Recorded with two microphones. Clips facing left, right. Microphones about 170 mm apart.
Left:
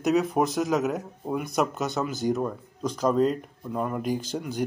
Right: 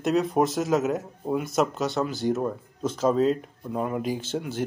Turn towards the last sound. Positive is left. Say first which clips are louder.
# even
turn(degrees=-5)  # may be behind; listen again after turning